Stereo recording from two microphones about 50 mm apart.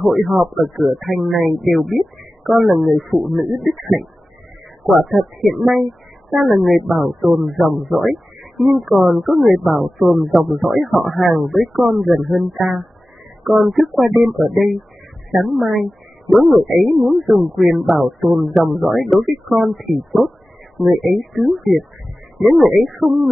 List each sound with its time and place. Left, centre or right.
0.0 s speech: centre